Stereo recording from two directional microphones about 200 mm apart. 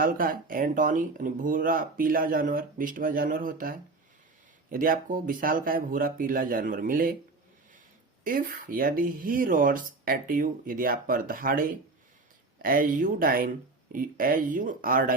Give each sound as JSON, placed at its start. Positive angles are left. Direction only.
{"t": 0.0, "sound": "speech", "side_deg": -45}
{"t": 8.2, "sound": "speech", "side_deg": -45}